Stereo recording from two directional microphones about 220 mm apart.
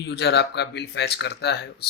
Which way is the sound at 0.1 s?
50° left (ahead or behind).